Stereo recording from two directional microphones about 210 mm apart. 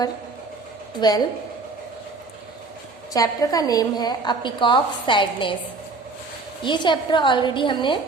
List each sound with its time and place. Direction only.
0.9 s a woman's voice: 20° left (ahead or behind)
3.1 s a woman's voice: 15° left (ahead or behind)
6.6 s a woman's voice: 20° left (ahead or behind)